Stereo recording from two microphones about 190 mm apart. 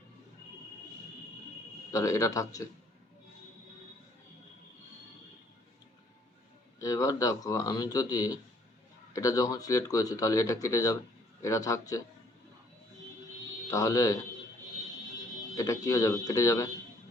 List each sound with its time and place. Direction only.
1.9 s speech: 15° left (ahead or behind)
6.7 s speech: 15° left (ahead or behind)
13.7 s speech: 15° left (ahead or behind)
15.5 s speech: 15° left (ahead or behind)